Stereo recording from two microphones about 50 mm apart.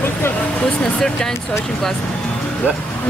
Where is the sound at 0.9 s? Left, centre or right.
Centre.